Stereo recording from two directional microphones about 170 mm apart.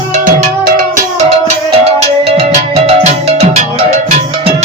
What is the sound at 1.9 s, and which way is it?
Music, 35° right (ahead or behind).